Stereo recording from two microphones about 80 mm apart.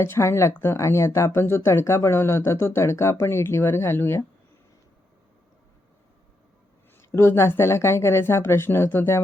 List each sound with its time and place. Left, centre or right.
0.0 s speech: left
7.1 s speech: left